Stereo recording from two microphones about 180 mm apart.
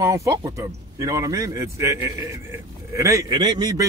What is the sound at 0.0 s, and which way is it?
Speech, 15° right (ahead or behind).